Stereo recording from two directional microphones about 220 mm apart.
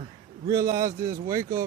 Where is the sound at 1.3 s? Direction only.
15° right (ahead or behind).